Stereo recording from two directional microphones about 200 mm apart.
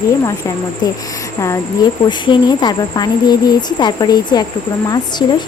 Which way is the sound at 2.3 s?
20° left (ahead or behind).